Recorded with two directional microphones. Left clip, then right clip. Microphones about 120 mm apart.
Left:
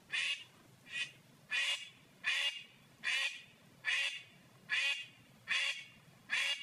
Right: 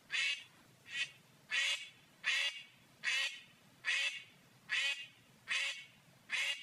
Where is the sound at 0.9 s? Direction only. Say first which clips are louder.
Right 1 dB; 25° right (ahead or behind).